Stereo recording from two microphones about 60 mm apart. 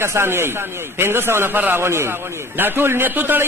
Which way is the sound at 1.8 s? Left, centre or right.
Right.